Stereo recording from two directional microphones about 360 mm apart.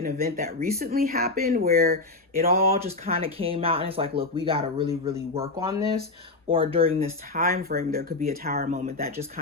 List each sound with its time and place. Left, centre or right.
0.0 s speech: right